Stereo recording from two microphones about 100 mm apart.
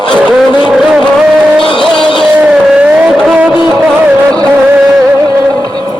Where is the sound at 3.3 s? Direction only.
15° right (ahead or behind).